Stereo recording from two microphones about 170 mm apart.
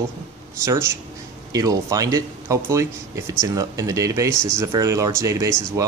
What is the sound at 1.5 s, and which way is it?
Speech, 20° right (ahead or behind).